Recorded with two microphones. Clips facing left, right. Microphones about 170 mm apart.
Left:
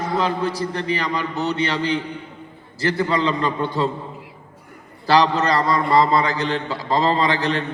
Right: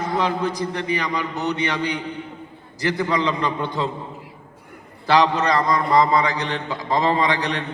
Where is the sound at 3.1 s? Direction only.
15° right (ahead or behind).